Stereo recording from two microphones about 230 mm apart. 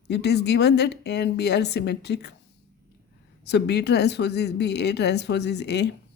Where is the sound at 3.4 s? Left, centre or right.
Left.